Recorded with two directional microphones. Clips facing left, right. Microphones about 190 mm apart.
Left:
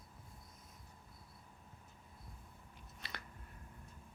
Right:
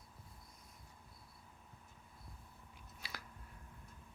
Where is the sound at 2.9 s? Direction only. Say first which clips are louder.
Left 1 dB; 5° right (ahead or behind).